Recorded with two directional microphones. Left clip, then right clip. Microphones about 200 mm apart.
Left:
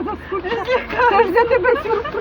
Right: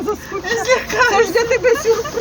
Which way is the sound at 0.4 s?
65° right (ahead or behind).